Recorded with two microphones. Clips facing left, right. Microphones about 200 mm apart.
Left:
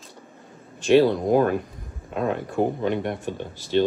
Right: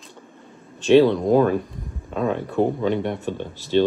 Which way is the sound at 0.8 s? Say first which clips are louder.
Right 3 dB; 10° left (ahead or behind).